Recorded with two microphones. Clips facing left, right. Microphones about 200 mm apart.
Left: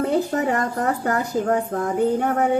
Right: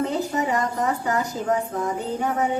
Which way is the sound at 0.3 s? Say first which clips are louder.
Left 2 dB; 60° left (ahead or behind).